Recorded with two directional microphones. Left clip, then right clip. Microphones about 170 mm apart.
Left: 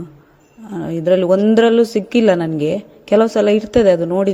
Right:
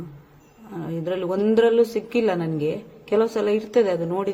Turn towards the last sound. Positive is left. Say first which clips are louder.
# left 9 dB
turn(degrees=35)  # may be behind; listen again after turning